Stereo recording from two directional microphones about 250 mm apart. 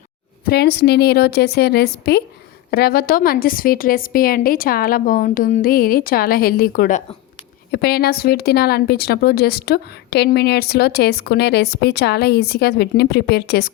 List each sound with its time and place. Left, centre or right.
0.4 s a woman's voice: left